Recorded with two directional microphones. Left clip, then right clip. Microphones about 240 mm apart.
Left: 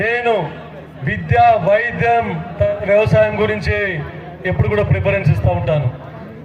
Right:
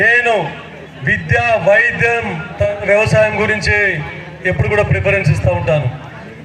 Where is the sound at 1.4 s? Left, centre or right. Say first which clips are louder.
Right 3 dB; left.